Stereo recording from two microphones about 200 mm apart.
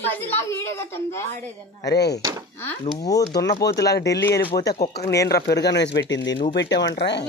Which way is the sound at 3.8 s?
55° left (ahead or behind).